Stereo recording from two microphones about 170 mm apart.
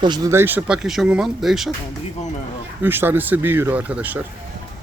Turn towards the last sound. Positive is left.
turn(degrees=-10)  # may be behind; listen again after turning